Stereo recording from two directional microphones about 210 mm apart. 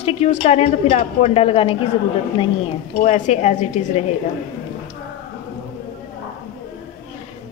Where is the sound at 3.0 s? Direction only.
35° left (ahead or behind).